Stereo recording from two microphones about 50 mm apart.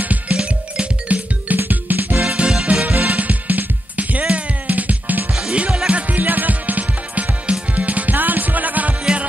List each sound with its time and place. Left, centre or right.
0.0 s music: right
0.4 s music: centre
1.0 s music: right
2.2 s music: centre
2.9 s music: right
5.3 s music: centre
5.9 s music: right